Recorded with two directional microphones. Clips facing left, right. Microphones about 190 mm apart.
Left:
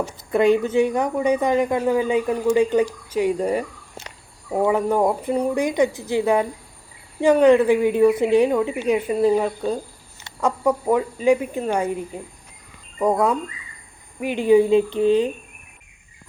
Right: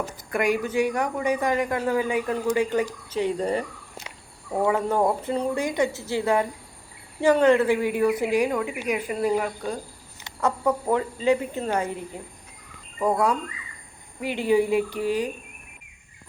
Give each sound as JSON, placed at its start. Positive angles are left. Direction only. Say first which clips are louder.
{"t": 0.3, "sound": "a woman's voice", "louder": "left 7 dB", "side_deg": 25}
{"t": 10.4, "sound": "a woman's voice", "louder": "left 3 dB", "side_deg": 10}